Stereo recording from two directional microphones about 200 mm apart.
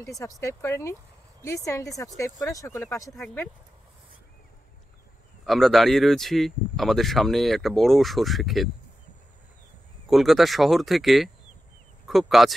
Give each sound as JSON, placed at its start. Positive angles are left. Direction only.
{"t": 0.0, "sound": "speech", "side_deg": 15}
{"t": 5.4, "sound": "speech", "side_deg": 0}
{"t": 10.0, "sound": "speech", "side_deg": 0}